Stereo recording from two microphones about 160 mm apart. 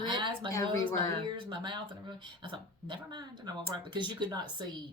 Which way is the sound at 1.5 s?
30° right (ahead or behind).